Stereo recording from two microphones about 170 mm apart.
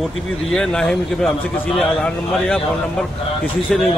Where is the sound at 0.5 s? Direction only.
5° left (ahead or behind).